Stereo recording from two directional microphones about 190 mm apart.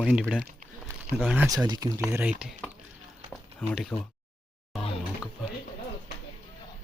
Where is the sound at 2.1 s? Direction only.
10° right (ahead or behind).